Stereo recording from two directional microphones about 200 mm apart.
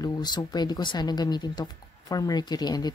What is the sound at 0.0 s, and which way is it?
Speech, 20° left (ahead or behind).